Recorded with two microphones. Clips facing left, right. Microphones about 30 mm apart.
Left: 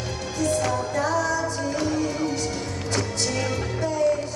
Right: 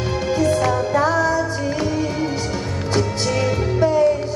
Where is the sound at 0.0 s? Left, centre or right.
Right.